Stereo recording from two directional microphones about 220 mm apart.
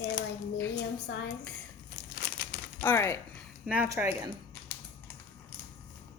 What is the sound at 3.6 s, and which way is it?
Speech, 5° right (ahead or behind).